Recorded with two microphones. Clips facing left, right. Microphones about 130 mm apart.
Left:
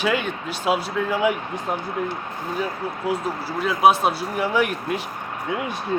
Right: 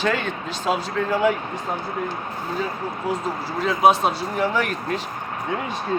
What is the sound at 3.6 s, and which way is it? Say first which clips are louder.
Speech: even; 5° left (ahead or behind).